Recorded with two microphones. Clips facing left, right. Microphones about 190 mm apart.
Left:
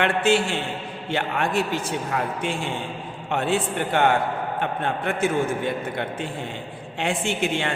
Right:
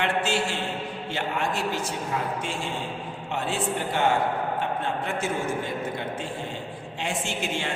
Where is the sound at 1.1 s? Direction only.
60° left (ahead or behind).